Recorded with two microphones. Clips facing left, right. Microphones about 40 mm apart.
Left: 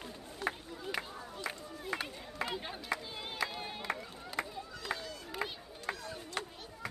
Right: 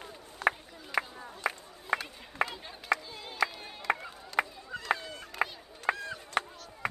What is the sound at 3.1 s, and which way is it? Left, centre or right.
Crowd, centre.